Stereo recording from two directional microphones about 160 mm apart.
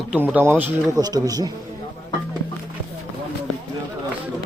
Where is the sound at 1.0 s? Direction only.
25° right (ahead or behind).